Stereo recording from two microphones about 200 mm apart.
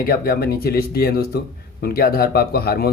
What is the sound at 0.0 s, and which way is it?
Speech, 50° left (ahead or behind).